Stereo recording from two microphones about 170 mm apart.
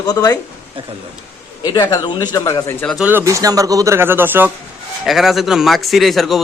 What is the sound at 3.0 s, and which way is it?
Speech, 15° right (ahead or behind).